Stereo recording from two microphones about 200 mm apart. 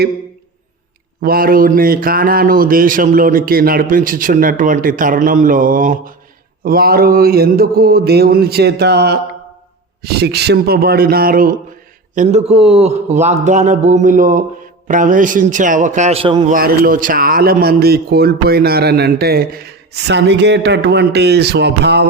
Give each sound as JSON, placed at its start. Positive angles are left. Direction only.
{"t": 1.2, "sound": "a man's voice", "side_deg": -45}
{"t": 12.1, "sound": "a man's voice", "side_deg": -35}
{"t": 16.5, "sound": "a man's voice", "side_deg": -45}